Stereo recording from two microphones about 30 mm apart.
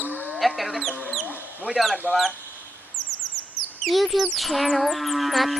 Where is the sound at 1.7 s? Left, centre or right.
Right.